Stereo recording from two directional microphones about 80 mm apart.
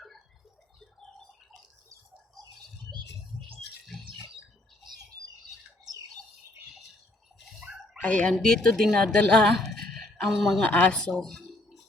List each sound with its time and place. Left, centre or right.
8.0 s speech: centre
10.7 s speech: centre